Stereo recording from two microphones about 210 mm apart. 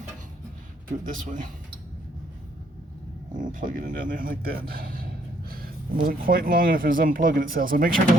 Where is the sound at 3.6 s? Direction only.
40° right (ahead or behind).